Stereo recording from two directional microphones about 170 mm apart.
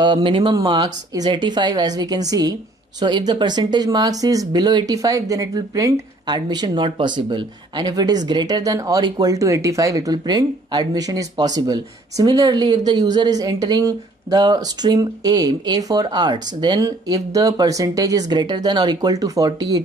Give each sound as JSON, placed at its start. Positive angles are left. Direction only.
{"t": 0.0, "sound": "speech", "side_deg": -30}